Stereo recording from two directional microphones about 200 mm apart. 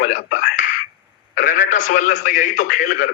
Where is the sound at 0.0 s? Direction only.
40° left (ahead or behind).